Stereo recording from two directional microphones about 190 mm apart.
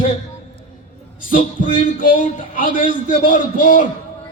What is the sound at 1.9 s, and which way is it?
A man's voice, 45° left (ahead or behind).